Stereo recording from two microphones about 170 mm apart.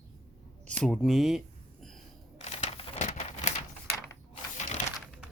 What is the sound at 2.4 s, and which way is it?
Typewriter, 40° left (ahead or behind).